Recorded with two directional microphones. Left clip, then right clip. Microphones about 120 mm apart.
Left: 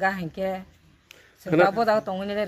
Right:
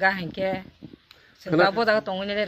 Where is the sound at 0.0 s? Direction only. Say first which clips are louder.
Right 2 dB; centre (ahead or behind).